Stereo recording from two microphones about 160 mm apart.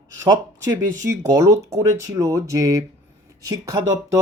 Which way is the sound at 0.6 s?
20° right (ahead or behind).